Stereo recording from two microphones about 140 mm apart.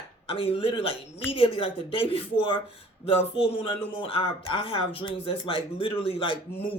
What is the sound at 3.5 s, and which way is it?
Speech, 40° left (ahead or behind).